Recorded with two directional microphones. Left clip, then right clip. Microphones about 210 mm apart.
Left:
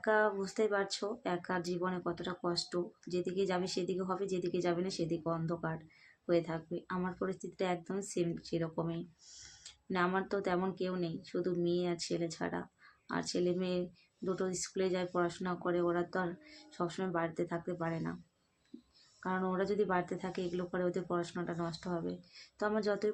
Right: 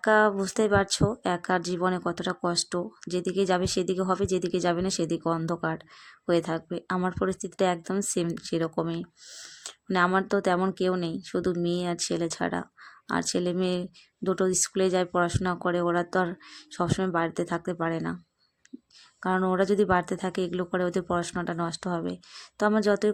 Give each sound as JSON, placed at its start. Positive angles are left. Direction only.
{"t": 0.0, "sound": "speech", "side_deg": -45}
{"t": 19.2, "sound": "speech", "side_deg": -45}